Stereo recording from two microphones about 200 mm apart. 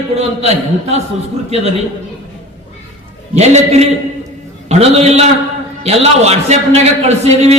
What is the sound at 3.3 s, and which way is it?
A man's voice, 35° right (ahead or behind).